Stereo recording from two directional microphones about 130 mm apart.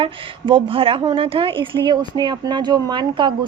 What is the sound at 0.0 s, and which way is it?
A woman's voice, 40° right (ahead or behind).